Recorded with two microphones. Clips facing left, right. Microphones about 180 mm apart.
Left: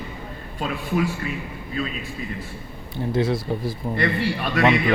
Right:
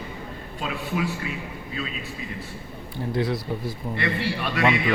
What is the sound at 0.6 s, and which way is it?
Speech, 45° left (ahead or behind).